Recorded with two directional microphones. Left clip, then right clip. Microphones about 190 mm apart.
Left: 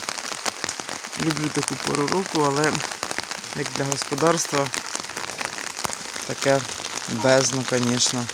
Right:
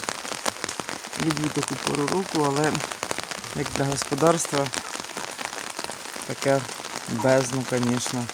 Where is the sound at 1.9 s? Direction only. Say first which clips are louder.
Left 3 dB; centre (ahead or behind).